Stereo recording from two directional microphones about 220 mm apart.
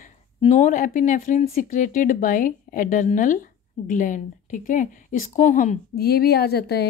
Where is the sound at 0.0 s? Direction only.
30° left (ahead or behind).